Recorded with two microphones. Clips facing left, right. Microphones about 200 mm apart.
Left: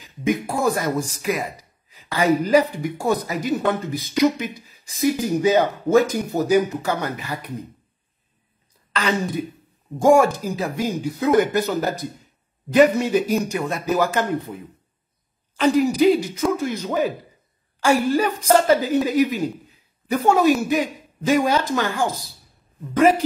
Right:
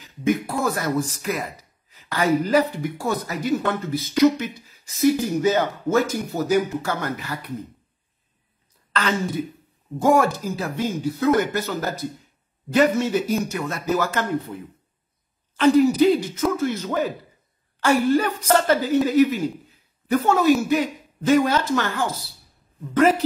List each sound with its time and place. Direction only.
0.0 s speech: 15° left (ahead or behind)
8.9 s speech: 15° left (ahead or behind)
15.5 s a man's voice: 15° left (ahead or behind)